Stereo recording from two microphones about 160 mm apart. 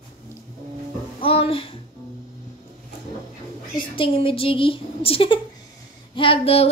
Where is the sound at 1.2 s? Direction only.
35° left (ahead or behind).